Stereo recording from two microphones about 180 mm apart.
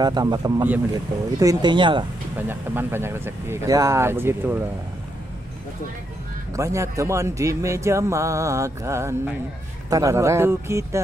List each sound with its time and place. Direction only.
0.0 s speech: 20° right (ahead or behind)
2.3 s speech: 10° right (ahead or behind)
6.5 s speech: 15° right (ahead or behind)